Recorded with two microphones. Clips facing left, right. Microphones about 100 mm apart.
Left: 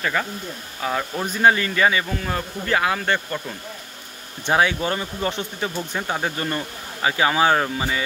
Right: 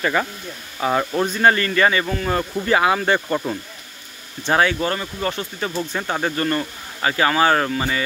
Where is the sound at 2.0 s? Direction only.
5° right (ahead or behind).